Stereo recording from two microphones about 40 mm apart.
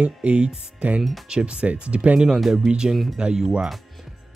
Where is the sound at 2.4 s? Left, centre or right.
Centre.